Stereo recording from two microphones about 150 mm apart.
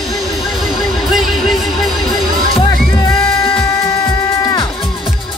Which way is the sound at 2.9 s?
25° left (ahead or behind).